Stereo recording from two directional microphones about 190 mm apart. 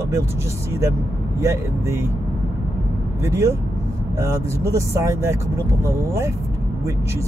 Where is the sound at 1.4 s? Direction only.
15° right (ahead or behind).